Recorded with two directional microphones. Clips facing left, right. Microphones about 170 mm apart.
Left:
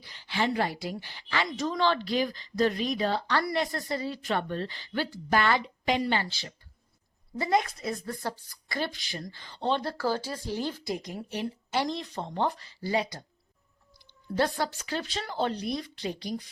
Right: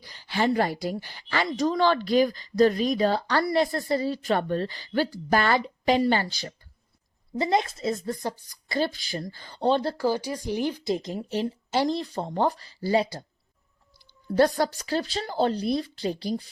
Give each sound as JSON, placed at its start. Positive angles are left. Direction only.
{"t": 0.0, "sound": "a woman's voice", "side_deg": -40}
{"t": 7.3, "sound": "a woman's voice", "side_deg": -25}
{"t": 8.8, "sound": "a woman's voice", "side_deg": -35}
{"t": 10.0, "sound": "speech", "side_deg": -15}
{"t": 10.9, "sound": "a woman's voice", "side_deg": -25}
{"t": 14.3, "sound": "a woman's voice", "side_deg": -40}